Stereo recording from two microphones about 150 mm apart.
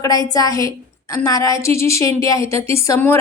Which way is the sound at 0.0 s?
25° left (ahead or behind).